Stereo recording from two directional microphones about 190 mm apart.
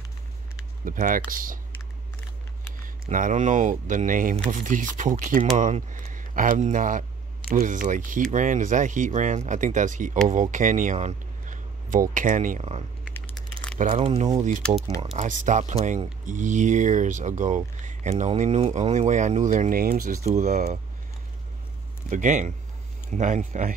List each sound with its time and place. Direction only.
0.8 s speech: 45° right (ahead or behind)
2.8 s speech: 45° right (ahead or behind)
13.1 s a sound: 5° left (ahead or behind)
13.7 s speech: 35° right (ahead or behind); by 20.2 s 50° right (ahead or behind)
20.2 s speech: 40° right (ahead or behind)
22.1 s speech: 40° right (ahead or behind)